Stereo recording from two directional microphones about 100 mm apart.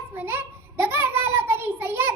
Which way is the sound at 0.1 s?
20° right (ahead or behind).